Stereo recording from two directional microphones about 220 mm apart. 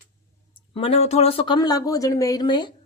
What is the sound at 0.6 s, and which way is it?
A woman's voice, 25° left (ahead or behind).